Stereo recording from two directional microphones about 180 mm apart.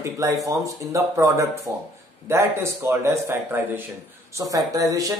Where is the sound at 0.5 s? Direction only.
15° right (ahead or behind).